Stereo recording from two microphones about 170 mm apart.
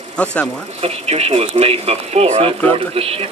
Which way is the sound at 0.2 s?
5° left (ahead or behind).